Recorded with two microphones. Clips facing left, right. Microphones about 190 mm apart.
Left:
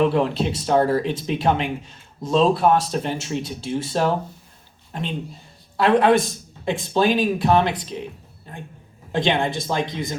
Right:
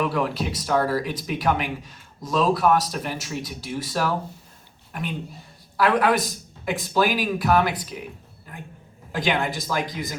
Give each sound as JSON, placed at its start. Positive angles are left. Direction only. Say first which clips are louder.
{"t": 0.0, "sound": "speech", "louder": "left 5 dB", "side_deg": 25}
{"t": 8.5, "sound": "a sound", "louder": "left 3 dB", "side_deg": 25}
{"t": 9.1, "sound": "speech", "louder": "left 3 dB", "side_deg": 25}